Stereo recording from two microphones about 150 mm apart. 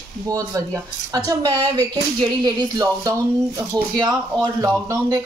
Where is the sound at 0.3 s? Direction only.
25° right (ahead or behind).